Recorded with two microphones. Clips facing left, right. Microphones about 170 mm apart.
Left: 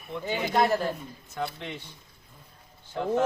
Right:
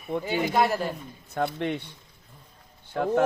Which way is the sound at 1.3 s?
60° right (ahead or behind).